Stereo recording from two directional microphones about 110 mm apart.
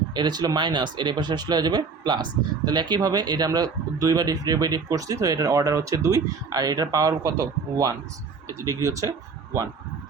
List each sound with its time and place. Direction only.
0.1 s speech: 40° right (ahead or behind)